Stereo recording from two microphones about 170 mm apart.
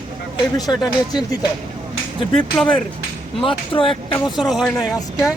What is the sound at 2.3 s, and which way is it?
Speech, 5° left (ahead or behind).